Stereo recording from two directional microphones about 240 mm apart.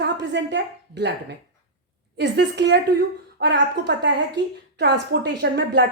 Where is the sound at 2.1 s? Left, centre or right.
Right.